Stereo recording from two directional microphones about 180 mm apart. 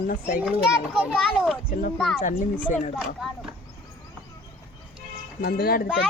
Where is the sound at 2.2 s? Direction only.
45° left (ahead or behind).